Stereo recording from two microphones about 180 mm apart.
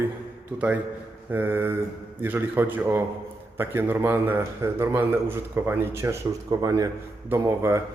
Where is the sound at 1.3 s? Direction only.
10° right (ahead or behind).